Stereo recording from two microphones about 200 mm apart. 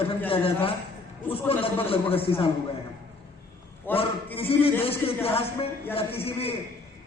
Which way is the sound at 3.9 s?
10° left (ahead or behind).